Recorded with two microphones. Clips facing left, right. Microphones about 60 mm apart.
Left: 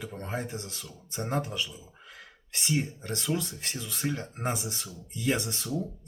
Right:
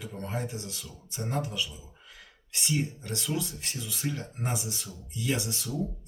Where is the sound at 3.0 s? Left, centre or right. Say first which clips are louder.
Left 1 dB; left.